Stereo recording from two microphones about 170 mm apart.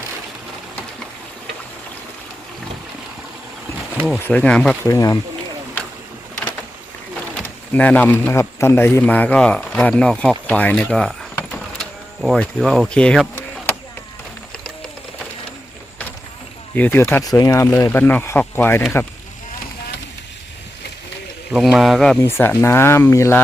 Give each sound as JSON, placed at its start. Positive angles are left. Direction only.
{"t": 4.1, "sound": "a man's voice", "side_deg": 5}
{"t": 4.9, "sound": "speech", "side_deg": 20}
{"t": 7.3, "sound": "speech", "side_deg": 10}
{"t": 16.7, "sound": "speech", "side_deg": 10}
{"t": 21.5, "sound": "a man's voice", "side_deg": 0}
{"t": 22.2, "sound": "speech", "side_deg": 15}